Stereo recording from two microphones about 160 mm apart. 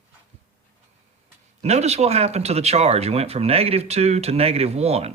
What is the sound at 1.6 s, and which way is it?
Speech, 40° right (ahead or behind).